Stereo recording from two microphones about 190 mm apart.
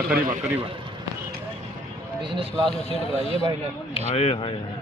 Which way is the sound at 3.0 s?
30° left (ahead or behind).